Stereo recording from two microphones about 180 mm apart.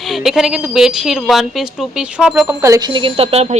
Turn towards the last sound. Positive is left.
turn(degrees=-30)  # may be behind; listen again after turning